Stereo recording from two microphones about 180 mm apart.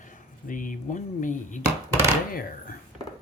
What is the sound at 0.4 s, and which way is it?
Speech, 50° left (ahead or behind).